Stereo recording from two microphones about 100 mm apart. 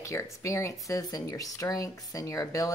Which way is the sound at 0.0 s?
30° left (ahead or behind).